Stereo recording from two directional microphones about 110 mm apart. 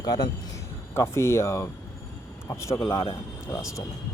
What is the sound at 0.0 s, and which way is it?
Speech, 35° left (ahead or behind).